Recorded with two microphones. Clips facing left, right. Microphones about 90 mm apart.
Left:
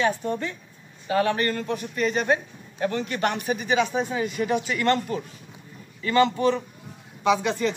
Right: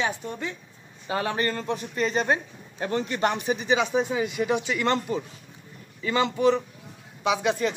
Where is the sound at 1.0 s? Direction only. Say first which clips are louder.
Left 4 dB; 25° right (ahead or behind).